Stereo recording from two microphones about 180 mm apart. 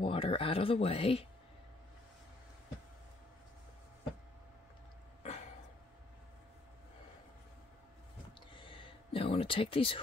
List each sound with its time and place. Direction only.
0.0 s speech: 30° left (ahead or behind)
5.2 s throat clearing: 40° left (ahead or behind)
8.4 s a sound: 30° left (ahead or behind)